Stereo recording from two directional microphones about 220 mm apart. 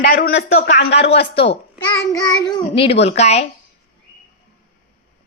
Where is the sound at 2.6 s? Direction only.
25° left (ahead or behind).